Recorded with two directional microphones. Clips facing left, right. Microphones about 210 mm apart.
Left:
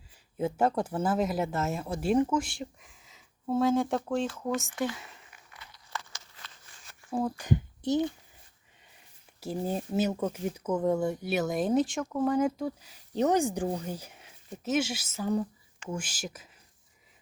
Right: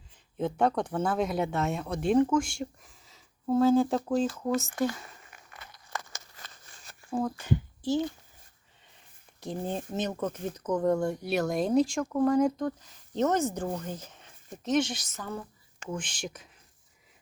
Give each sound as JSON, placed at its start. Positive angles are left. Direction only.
{"t": 0.3, "sound": "speech", "side_deg": 5}
{"t": 4.9, "sound": "crumpling", "side_deg": -50}
{"t": 7.1, "sound": "speech", "side_deg": 10}
{"t": 9.4, "sound": "speech", "side_deg": 5}